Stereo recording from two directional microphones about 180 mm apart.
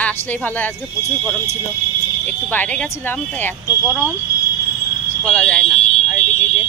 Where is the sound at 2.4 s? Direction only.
10° left (ahead or behind).